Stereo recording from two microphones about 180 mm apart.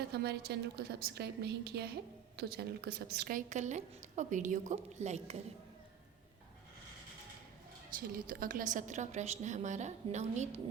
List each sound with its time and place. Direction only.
0.1 s a woman's voice: 60° right (ahead or behind); by 5.4 s 40° right (ahead or behind)
7.9 s a woman's voice: 50° right (ahead or behind)